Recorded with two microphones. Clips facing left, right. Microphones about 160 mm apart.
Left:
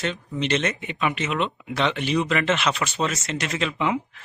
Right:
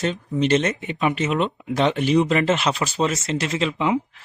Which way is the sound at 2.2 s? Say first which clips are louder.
Right 4 dB; 35° right (ahead or behind).